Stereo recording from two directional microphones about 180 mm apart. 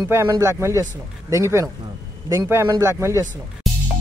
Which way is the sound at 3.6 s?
Centre (ahead or behind).